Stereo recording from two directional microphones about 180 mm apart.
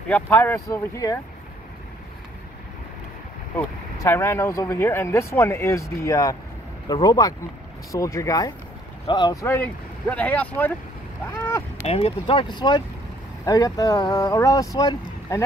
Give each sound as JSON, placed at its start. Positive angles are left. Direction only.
{"t": 0.1, "sound": "speech", "side_deg": 10}
{"t": 3.5, "sound": "speech", "side_deg": 15}
{"t": 11.2, "sound": "rowboat", "side_deg": 15}
{"t": 11.9, "sound": "speech", "side_deg": 30}